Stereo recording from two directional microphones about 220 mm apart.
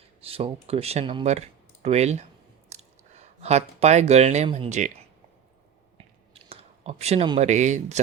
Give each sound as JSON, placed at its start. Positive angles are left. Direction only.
{"t": 0.2, "sound": "speech", "side_deg": -25}
{"t": 6.3, "sound": "speech", "side_deg": -25}